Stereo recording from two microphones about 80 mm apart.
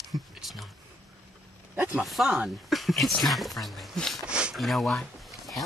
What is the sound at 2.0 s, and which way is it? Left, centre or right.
Speech, centre.